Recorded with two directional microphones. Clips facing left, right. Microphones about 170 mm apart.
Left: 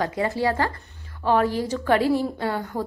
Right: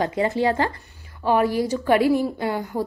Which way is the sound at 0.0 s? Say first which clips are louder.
Right 2 dB; 20° right (ahead or behind).